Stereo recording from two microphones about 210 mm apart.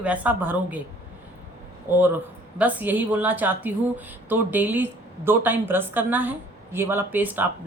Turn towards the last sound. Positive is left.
turn(degrees=-10)  # may be behind; listen again after turning